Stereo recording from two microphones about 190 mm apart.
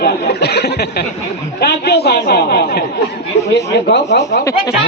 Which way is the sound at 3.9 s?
60° left (ahead or behind).